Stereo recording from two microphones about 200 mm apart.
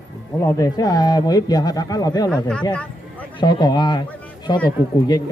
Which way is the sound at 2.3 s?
5° left (ahead or behind).